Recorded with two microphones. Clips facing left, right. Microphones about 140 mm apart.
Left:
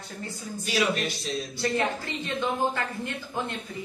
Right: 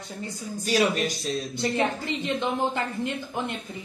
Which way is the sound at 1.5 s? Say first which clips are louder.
Right 1 dB; 20° right (ahead or behind).